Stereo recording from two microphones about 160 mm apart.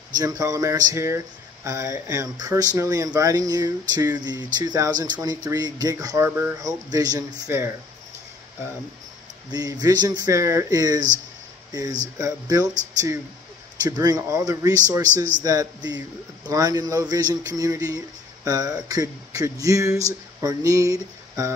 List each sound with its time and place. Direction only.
0.2 s speech: 20° right (ahead or behind)
9.5 s speech: 25° right (ahead or behind)
13.8 s speech: 25° right (ahead or behind)
20.3 s a sound: 20° right (ahead or behind)